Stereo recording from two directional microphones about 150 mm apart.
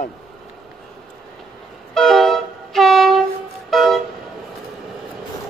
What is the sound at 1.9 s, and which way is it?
Train, centre (ahead or behind).